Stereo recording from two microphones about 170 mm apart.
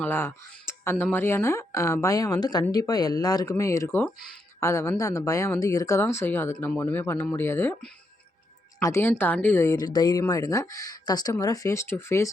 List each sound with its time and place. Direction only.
0.0 s speech: 15° left (ahead or behind)